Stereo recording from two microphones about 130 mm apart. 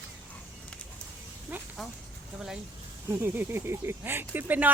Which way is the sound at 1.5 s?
10° right (ahead or behind).